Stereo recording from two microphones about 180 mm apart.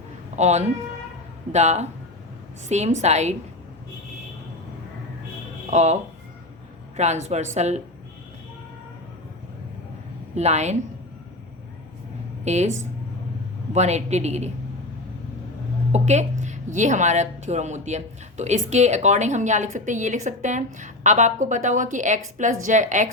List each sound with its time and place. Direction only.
0.3 s a woman's voice: 40° right (ahead or behind)
5.7 s a woman's voice: 40° right (ahead or behind)
10.3 s a woman's voice: 40° right (ahead or behind)
12.5 s a woman's voice: 40° right (ahead or behind)
13.7 s a woman's voice: 40° right (ahead or behind)
15.9 s a woman's voice: 40° right (ahead or behind)